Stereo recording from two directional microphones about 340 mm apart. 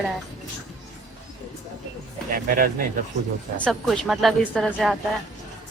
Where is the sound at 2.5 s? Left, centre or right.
Right.